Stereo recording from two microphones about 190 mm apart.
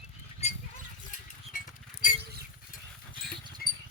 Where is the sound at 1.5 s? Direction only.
45° left (ahead or behind).